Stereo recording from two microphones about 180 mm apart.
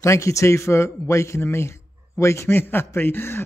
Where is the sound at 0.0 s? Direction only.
15° left (ahead or behind).